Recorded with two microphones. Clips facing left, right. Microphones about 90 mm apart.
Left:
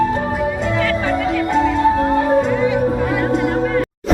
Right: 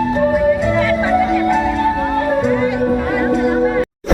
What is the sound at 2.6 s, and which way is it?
Music, centre (ahead or behind).